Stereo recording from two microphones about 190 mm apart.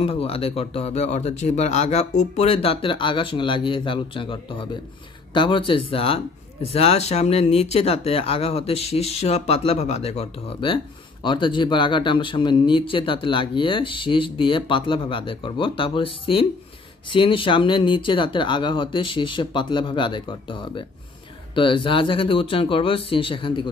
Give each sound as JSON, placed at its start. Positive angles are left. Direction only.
{"t": 0.0, "sound": "speech", "side_deg": 30}